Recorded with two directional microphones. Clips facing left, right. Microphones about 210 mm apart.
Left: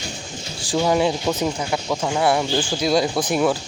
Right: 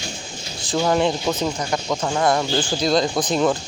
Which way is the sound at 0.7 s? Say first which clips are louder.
Even; 10° left (ahead or behind).